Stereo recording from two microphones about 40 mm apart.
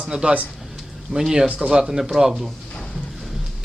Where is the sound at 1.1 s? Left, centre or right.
Centre.